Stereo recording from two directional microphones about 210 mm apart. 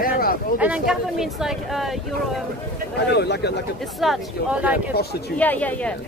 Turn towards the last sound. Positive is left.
turn(degrees=5)  # may be behind; listen again after turning